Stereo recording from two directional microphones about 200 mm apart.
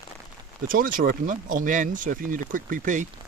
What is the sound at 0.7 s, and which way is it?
Speech, 45° right (ahead or behind).